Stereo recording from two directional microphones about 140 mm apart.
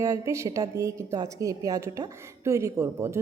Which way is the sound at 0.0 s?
20° right (ahead or behind).